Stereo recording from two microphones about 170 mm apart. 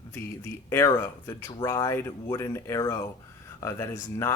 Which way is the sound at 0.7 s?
15° left (ahead or behind).